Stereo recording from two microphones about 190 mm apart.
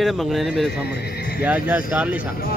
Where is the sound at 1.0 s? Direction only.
55° left (ahead or behind).